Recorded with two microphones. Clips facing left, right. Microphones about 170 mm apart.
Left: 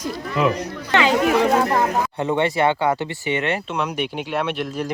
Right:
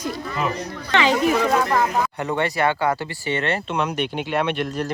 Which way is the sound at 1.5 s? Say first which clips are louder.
Left 2 dB; 30° left (ahead or behind).